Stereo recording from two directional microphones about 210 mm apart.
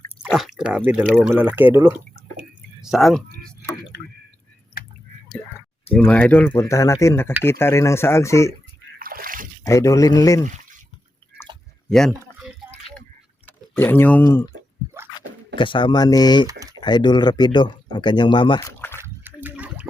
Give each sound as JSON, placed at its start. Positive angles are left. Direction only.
{"t": 0.2, "sound": "drip", "side_deg": 0}
{"t": 1.0, "sound": "speech", "side_deg": 0}
{"t": 6.1, "sound": "speech", "side_deg": 5}
{"t": 9.0, "sound": "splash", "side_deg": -45}
{"t": 9.6, "sound": "speech", "side_deg": 15}
{"t": 10.4, "sound": "a sound", "side_deg": -40}
{"t": 11.9, "sound": "speech", "side_deg": 5}
{"t": 13.7, "sound": "speech", "side_deg": 10}
{"t": 15.5, "sound": "speech", "side_deg": 25}
{"t": 16.5, "sound": "a sound", "side_deg": -15}
{"t": 16.8, "sound": "speech", "side_deg": 20}
{"t": 18.7, "sound": "a sound", "side_deg": 10}
{"t": 18.9, "sound": "a sound", "side_deg": -10}